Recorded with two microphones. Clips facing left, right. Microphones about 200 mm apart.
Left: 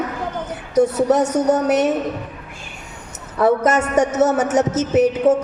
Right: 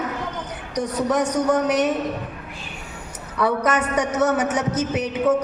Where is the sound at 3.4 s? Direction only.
45° left (ahead or behind).